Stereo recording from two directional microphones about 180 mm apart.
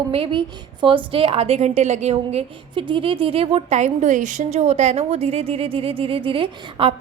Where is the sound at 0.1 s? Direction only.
30° right (ahead or behind).